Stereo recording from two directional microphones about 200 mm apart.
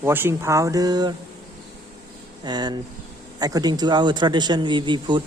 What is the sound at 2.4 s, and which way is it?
A man's voice, 20° right (ahead or behind).